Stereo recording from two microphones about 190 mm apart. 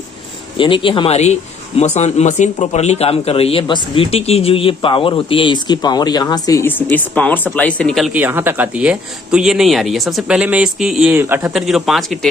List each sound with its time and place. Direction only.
0.6 s speech: 25° left (ahead or behind); by 12.3 s centre (ahead or behind)